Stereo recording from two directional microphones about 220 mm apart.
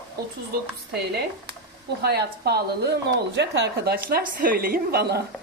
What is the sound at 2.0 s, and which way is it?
A woman's voice, 45° right (ahead or behind).